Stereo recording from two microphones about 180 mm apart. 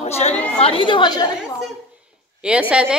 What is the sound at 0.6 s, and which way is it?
Speech, 30° left (ahead or behind).